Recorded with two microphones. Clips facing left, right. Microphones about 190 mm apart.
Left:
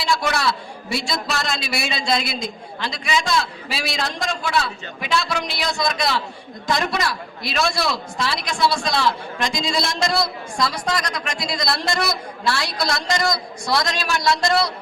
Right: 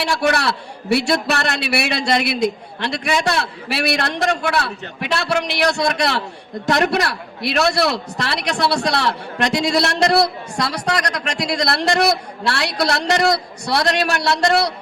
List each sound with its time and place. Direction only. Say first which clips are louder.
0.0 s a man's voice: right 3 dB; 65° right (ahead or behind)